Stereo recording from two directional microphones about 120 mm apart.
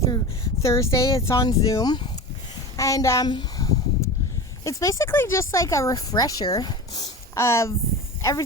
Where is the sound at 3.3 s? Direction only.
30° left (ahead or behind).